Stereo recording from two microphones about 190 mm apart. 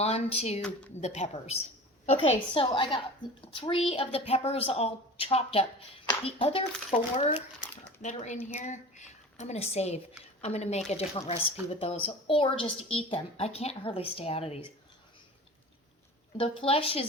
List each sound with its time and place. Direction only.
0.0 s a woman's voice: 35° left (ahead or behind)
7.6 s a sound: 10° left (ahead or behind)
8.0 s a woman's voice: 40° left (ahead or behind)
16.4 s a woman's voice: 30° left (ahead or behind)